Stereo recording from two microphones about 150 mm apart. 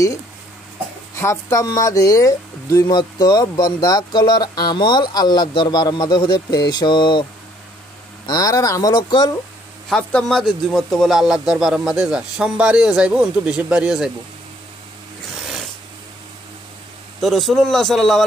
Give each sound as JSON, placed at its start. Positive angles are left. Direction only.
{"t": 1.1, "sound": "speech", "side_deg": 20}
{"t": 8.3, "sound": "speech", "side_deg": 25}
{"t": 9.8, "sound": "a man's voice", "side_deg": 5}
{"t": 17.2, "sound": "a man's voice", "side_deg": 0}